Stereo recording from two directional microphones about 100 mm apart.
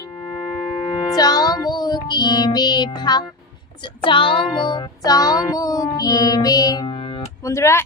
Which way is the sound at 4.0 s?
60° left (ahead or behind).